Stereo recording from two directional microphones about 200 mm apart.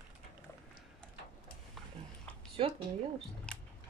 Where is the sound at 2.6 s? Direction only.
30° right (ahead or behind).